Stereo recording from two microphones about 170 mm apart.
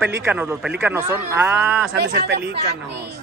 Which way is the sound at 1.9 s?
85° right.